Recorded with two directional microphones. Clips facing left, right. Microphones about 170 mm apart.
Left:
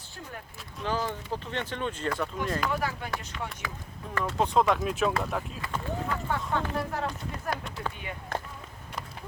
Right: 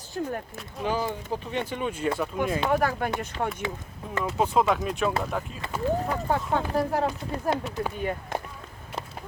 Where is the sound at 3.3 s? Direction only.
35° right (ahead or behind).